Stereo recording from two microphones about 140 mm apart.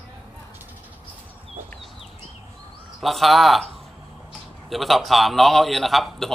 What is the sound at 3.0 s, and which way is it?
Speech, centre (ahead or behind).